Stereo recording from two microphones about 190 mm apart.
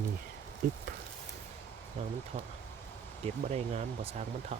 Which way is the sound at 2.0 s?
30° right (ahead or behind).